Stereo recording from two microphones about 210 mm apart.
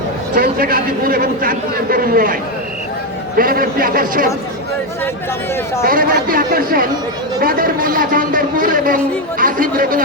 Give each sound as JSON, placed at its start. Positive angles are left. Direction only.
{"t": 0.3, "sound": "a man's voice", "side_deg": -45}
{"t": 5.8, "sound": "a man's voice", "side_deg": -40}